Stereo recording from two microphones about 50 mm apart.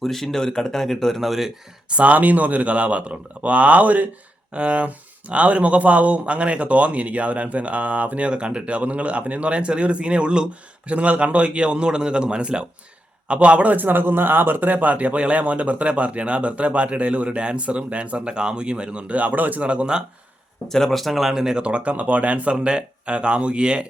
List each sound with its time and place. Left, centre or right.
0.0 s speech: centre
1.9 s speech: right
19.6 s speech: right
20.7 s speech: centre
21.6 s speech: right